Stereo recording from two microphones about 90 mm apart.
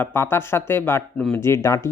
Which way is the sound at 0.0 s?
25° left (ahead or behind).